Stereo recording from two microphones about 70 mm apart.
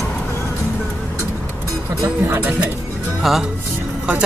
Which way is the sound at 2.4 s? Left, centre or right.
Right.